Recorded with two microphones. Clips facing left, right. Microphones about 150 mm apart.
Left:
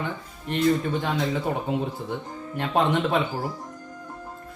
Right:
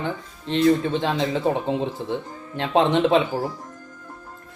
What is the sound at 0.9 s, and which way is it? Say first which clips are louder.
Speech: right 3 dB; 25° right (ahead or behind).